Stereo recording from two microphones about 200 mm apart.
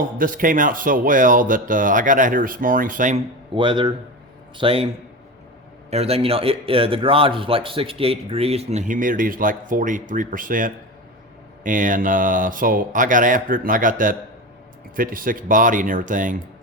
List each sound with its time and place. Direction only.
0.2 s speech: 45° right (ahead or behind)
3.5 s a man's voice: 25° right (ahead or behind)
5.9 s a man's voice: 30° right (ahead or behind)